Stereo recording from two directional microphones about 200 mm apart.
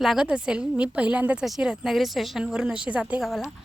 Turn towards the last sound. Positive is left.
turn(degrees=0)  # may be behind; listen again after turning